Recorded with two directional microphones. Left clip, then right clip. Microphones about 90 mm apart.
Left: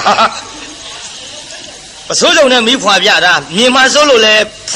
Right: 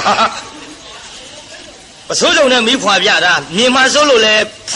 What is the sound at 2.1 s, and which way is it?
A man's voice, 40° right (ahead or behind).